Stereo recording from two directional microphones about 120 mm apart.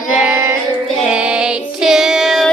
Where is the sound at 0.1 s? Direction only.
15° right (ahead or behind).